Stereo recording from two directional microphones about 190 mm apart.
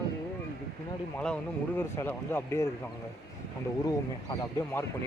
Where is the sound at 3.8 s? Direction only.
20° left (ahead or behind).